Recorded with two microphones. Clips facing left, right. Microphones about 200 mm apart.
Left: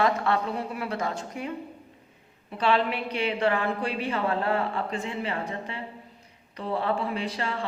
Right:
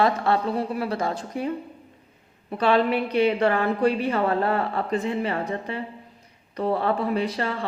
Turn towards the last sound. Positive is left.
turn(degrees=-45)  # may be behind; listen again after turning